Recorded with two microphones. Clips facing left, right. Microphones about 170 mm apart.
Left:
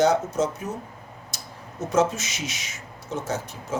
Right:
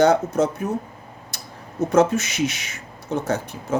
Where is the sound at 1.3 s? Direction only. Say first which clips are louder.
Right 1 dB; 60° right (ahead or behind).